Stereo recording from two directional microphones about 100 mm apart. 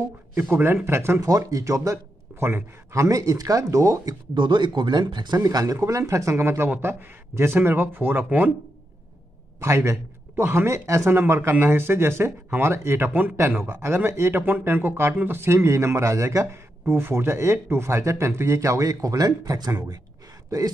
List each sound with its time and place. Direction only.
0.4 s speech: 20° right (ahead or behind)
4.4 s speech: 50° right (ahead or behind); by 8.5 s 20° right (ahead or behind)
9.6 s speech: 30° right (ahead or behind)